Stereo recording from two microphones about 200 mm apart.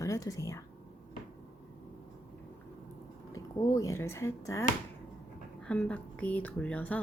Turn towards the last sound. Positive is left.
turn(degrees=5)  # may be behind; listen again after turning